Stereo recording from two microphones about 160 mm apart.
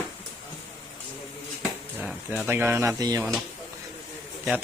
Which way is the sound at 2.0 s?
5° right (ahead or behind).